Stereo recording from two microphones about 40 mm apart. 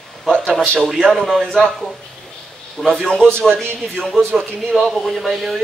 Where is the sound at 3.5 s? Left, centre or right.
Centre.